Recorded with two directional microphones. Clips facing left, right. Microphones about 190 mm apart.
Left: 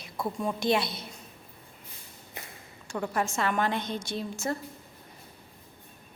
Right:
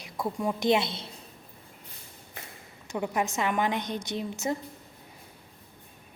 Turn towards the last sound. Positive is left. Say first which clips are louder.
# right 1 dB
turn(degrees=-20)  # may be behind; listen again after turning